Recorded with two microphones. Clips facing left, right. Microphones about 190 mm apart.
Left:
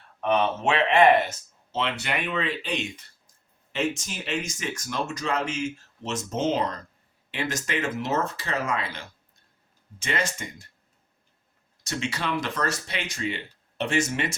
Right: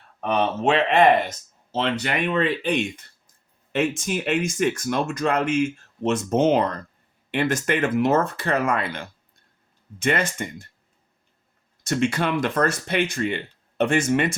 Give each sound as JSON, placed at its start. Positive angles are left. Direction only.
{"t": 0.2, "sound": "speech", "side_deg": -40}
{"t": 11.8, "sound": "speech", "side_deg": -55}